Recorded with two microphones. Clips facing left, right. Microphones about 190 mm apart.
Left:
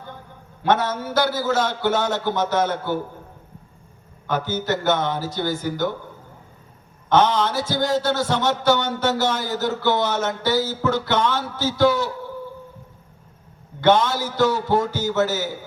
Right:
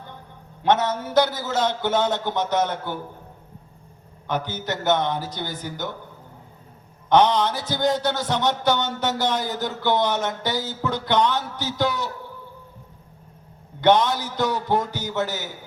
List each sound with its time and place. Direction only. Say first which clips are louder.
0.6 s a man's voice: even; 20° right (ahead or behind)
4.3 s a man's voice: left 4 dB; 20° right (ahead or behind)
7.1 s a man's voice: even; 20° right (ahead or behind)
13.8 s a man's voice: left 1 dB; 20° right (ahead or behind)